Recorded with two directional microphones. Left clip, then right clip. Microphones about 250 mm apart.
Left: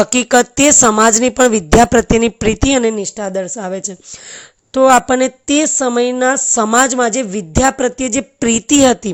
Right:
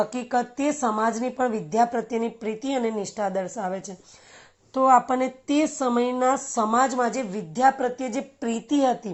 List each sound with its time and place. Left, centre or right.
0.0 s speech: left
2.2 s speech: left
2.6 s a woman's voice: left
8.4 s a woman's voice: left
8.6 s speech: left